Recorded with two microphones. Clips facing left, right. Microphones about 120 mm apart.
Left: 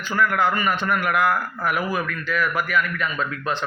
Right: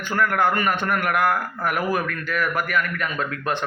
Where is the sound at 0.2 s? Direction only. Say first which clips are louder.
Even; 50° right (ahead or behind).